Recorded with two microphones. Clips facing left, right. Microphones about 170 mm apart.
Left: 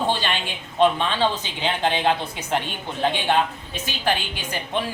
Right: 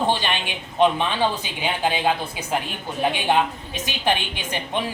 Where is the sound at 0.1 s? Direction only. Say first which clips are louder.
Right 1 dB; 15° right (ahead or behind).